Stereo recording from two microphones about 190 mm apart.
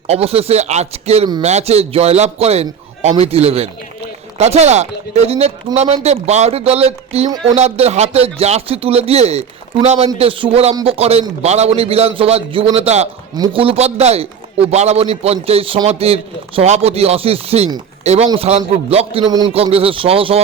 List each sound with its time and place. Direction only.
0.1 s a man's voice: 30° right (ahead or behind)